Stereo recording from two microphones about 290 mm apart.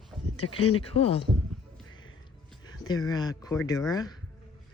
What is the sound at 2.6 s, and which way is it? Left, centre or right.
Speech, centre.